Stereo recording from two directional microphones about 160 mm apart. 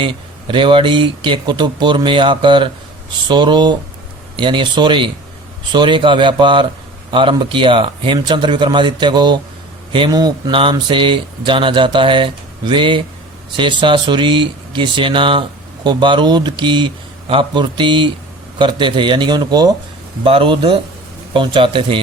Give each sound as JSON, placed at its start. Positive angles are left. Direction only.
{"t": 0.0, "sound": "speech", "side_deg": -30}